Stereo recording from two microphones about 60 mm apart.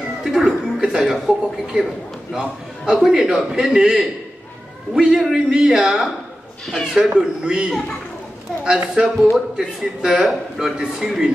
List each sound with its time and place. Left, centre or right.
0.2 s a man's voice: centre
7.2 s a man's voice: centre
9.0 s a man's voice: centre